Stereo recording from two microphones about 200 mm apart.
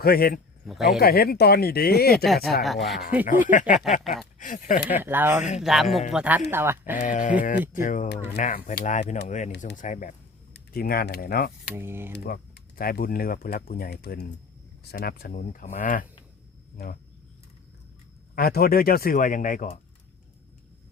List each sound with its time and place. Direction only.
0.0 s speech: 50° left (ahead or behind)
0.6 s speech: centre (ahead or behind)
0.9 s speech: 50° left (ahead or behind)
2.1 s speech: centre (ahead or behind)
3.2 s speech: 40° left (ahead or behind)
4.9 s speech: 10° right (ahead or behind)
7.0 s speech: 40° left (ahead or behind)
11.7 s speech: 10° right (ahead or behind)
12.1 s speech: 50° left (ahead or behind)
18.3 s speech: 50° left (ahead or behind)